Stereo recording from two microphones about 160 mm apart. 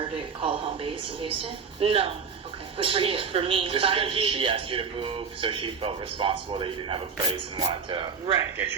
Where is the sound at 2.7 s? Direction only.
35° right (ahead or behind).